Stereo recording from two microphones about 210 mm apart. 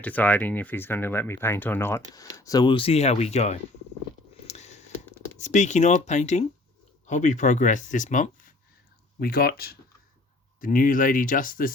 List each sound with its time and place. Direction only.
0.0 s speech: 5° left (ahead or behind); by 3.6 s 30° left (ahead or behind)
4.4 s a sound: 30° left (ahead or behind)
5.4 s speech: 35° left (ahead or behind)